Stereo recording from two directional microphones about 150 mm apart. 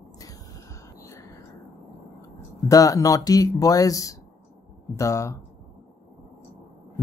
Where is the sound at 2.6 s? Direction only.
20° left (ahead or behind).